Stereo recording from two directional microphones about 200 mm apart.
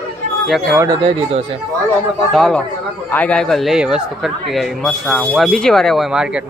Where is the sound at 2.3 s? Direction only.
Centre (ahead or behind).